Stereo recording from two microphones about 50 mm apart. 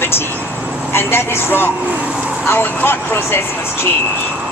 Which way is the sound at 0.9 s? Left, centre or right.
Left.